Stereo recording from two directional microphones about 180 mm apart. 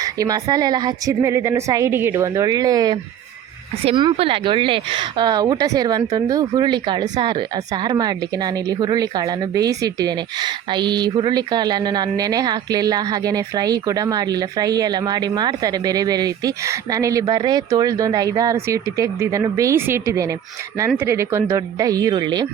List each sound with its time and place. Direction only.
0.0 s speech: 20° right (ahead or behind)